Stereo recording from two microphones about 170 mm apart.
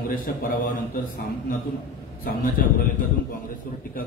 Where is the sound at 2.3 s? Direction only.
55° left (ahead or behind).